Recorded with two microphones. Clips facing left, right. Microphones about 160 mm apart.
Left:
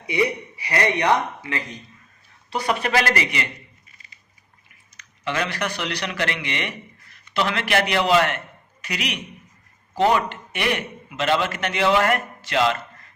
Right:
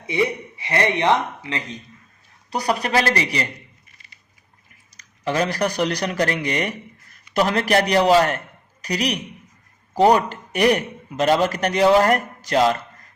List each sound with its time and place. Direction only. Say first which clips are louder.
0.0 s speech: right 1 dB; 25° right (ahead or behind)
2.5 s a man's voice: right 1 dB; 40° right (ahead or behind)
4.9 s a man's voice: right 4 dB; 40° right (ahead or behind)